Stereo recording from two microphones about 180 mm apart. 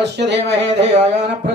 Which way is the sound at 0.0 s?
75° right (ahead or behind).